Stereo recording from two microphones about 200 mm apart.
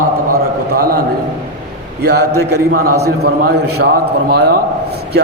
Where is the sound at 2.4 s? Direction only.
50° right (ahead or behind).